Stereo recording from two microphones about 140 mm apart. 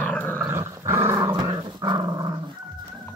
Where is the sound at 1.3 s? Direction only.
30° right (ahead or behind).